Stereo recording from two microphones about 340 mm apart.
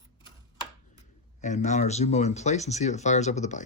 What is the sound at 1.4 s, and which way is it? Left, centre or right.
Speech, left.